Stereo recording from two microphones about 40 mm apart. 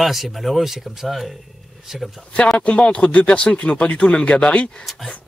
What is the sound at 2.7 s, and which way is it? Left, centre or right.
Speech, left.